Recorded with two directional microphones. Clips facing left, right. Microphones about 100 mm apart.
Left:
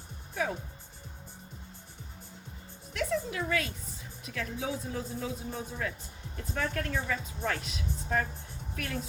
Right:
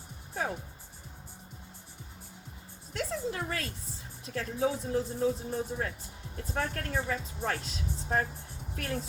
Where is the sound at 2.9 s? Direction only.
35° right (ahead or behind).